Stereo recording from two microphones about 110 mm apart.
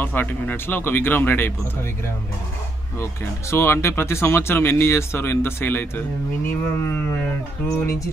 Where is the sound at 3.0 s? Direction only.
25° left (ahead or behind).